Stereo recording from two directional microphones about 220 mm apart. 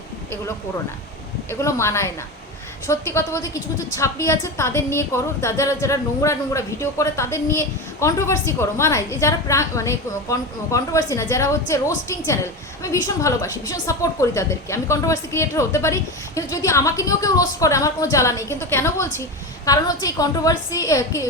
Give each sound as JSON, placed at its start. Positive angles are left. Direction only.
{"t": 1.5, "sound": "a woman's voice", "side_deg": 10}